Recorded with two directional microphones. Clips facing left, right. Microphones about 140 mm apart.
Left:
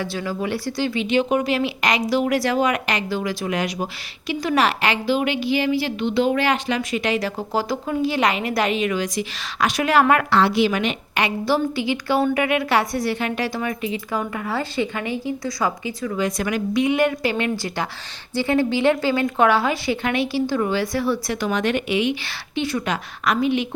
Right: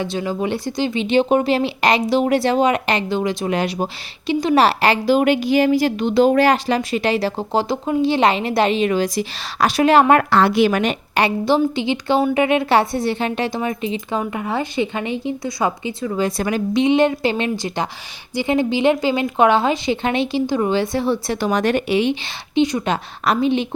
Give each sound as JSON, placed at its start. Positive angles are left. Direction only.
{"t": 0.0, "sound": "a woman's voice", "side_deg": -20}
{"t": 10.2, "sound": "a woman's voice", "side_deg": -45}
{"t": 11.4, "sound": "a woman's voice", "side_deg": -20}
{"t": 23.2, "sound": "a woman's voice", "side_deg": -30}